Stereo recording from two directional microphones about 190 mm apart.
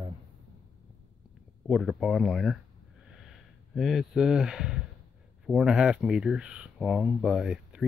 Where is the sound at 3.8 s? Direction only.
Centre (ahead or behind).